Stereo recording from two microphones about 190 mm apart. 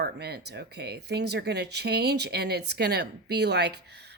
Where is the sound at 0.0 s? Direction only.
55° right (ahead or behind).